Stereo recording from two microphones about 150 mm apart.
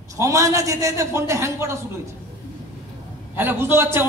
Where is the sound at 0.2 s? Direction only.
20° right (ahead or behind).